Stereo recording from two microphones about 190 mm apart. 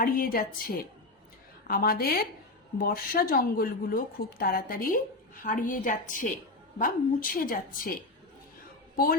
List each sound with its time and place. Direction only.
0.0 s a woman's voice: 50° left (ahead or behind)